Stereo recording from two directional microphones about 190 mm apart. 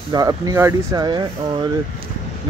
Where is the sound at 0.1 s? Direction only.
20° right (ahead or behind).